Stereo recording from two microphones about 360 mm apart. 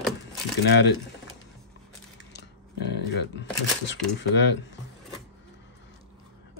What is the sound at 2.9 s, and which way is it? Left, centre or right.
Speech, left.